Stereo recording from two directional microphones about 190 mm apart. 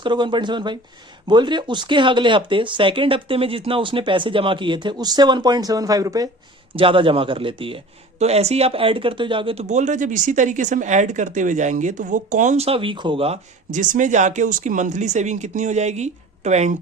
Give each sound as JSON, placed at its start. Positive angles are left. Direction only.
{"t": 0.0, "sound": "speech", "side_deg": -25}